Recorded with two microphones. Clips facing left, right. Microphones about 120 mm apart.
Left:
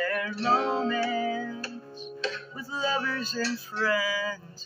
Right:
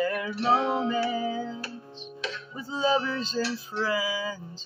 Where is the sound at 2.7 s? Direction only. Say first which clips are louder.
Right 4 dB; 20° right (ahead or behind).